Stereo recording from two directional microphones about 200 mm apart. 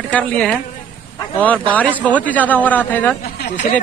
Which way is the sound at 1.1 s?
5° left (ahead or behind).